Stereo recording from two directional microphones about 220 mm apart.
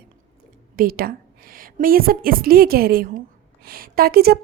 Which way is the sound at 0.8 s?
40° right (ahead or behind).